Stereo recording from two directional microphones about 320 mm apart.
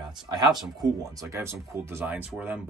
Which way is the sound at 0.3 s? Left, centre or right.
Centre.